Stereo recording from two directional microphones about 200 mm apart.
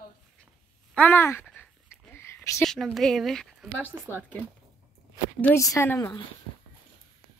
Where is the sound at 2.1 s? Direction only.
15° left (ahead or behind).